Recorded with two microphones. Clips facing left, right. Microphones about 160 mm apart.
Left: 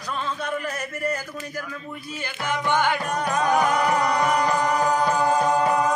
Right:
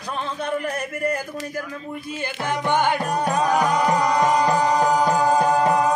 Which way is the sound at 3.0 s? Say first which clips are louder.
Right 3 dB; 35° right (ahead or behind).